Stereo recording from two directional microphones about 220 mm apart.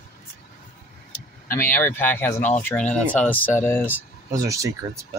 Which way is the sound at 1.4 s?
10° left (ahead or behind).